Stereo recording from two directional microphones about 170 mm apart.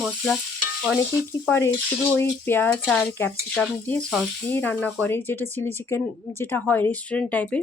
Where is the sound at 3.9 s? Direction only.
5° left (ahead or behind).